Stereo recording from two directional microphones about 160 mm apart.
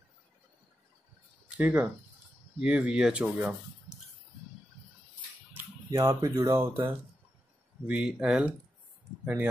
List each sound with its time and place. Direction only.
1.6 s speech: 10° right (ahead or behind)
5.9 s speech: 20° right (ahead or behind)